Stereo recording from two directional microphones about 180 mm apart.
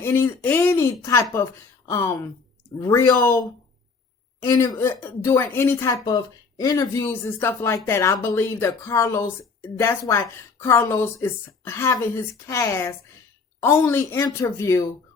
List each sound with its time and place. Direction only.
0.0 s speech: 10° left (ahead or behind)
4.4 s speech: 15° left (ahead or behind)